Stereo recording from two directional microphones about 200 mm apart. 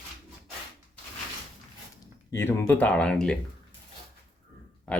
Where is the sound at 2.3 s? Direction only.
10° left (ahead or behind).